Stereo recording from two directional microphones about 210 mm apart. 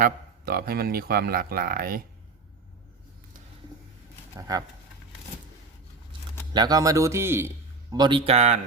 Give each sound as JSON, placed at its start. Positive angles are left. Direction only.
{"t": 0.0, "sound": "a man's voice", "side_deg": -45}
{"t": 4.4, "sound": "speech", "side_deg": -15}
{"t": 6.5, "sound": "a man's voice", "side_deg": -20}